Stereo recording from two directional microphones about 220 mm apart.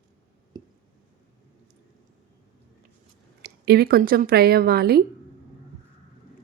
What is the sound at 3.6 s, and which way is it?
A woman's voice, 45° right (ahead or behind).